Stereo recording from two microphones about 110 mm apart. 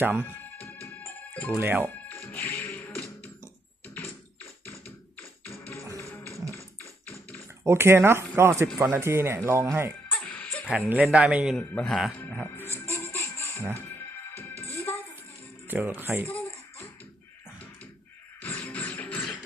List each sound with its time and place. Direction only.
0.0 s speech: 15° right (ahead or behind)
1.5 s speech: 20° right (ahead or behind)
2.0 s music: 15° left (ahead or behind)
3.8 s a sound: 15° left (ahead or behind)
7.6 s speech: 25° right (ahead or behind)
10.1 s music: 10° left (ahead or behind)
10.7 s speech: 10° right (ahead or behind)
11.6 s speech: 15° left (ahead or behind)
12.2 s music: 15° left (ahead or behind)
15.6 s speech: 15° right (ahead or behind)
16.2 s a sound: 15° left (ahead or behind)
18.4 s music: 15° left (ahead or behind)